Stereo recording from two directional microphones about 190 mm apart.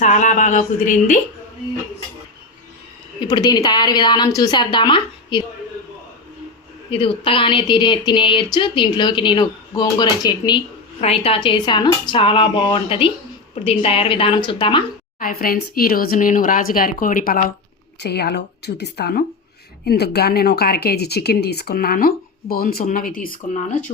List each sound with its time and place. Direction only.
0.0 s speech: 40° left (ahead or behind)
3.2 s a woman's voice: 20° left (ahead or behind)
6.9 s a woman's voice: 25° left (ahead or behind)
15.2 s speech: 50° left (ahead or behind)
18.0 s speech: 60° left (ahead or behind); by 23.8 s 45° left (ahead or behind)